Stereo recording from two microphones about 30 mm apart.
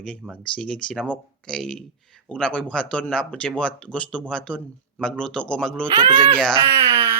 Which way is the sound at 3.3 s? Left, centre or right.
Left.